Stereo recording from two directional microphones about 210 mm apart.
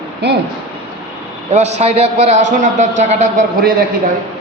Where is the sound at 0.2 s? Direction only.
50° right (ahead or behind).